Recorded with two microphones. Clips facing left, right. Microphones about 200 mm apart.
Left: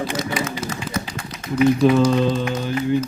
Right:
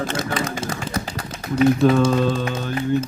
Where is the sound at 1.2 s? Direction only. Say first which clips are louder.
Right 1 dB; 40° right (ahead or behind).